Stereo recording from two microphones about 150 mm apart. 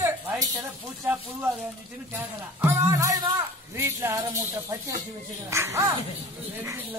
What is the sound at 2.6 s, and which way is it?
Music, 20° right (ahead or behind).